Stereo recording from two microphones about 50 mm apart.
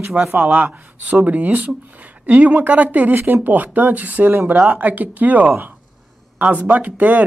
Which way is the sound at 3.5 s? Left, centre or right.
Right.